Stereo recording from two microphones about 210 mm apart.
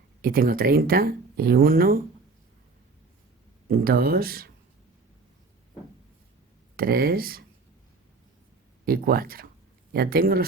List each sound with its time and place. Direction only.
0.2 s speech: 45° right (ahead or behind)
3.7 s speech: 45° right (ahead or behind)
6.7 s speech: 45° right (ahead or behind)
8.8 s speech: 45° right (ahead or behind)